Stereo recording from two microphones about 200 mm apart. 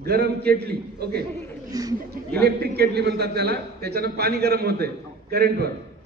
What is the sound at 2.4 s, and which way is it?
A man's voice, 50° right (ahead or behind).